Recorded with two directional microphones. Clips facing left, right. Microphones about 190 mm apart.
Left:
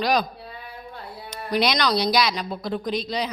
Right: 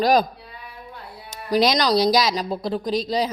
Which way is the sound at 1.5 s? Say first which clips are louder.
Right 4 dB; 40° right (ahead or behind).